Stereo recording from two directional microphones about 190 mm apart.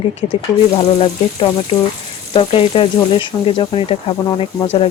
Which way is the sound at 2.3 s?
30° left (ahead or behind).